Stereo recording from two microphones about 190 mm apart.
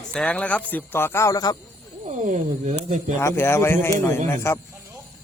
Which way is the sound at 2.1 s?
40° right (ahead or behind).